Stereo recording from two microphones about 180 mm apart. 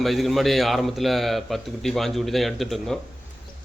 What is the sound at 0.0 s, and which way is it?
A man's voice, centre (ahead or behind).